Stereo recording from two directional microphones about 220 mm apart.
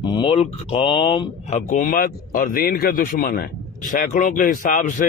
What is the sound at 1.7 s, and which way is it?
A man's voice, 40° left (ahead or behind).